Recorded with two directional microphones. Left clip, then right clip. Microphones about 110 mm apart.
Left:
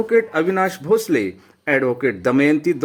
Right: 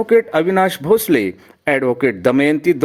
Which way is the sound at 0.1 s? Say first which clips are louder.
Right 4 dB; 30° right (ahead or behind).